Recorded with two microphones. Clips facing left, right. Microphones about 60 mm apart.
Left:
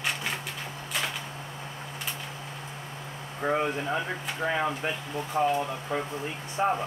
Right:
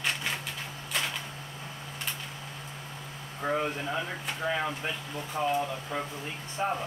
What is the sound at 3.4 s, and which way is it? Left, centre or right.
Speech, left.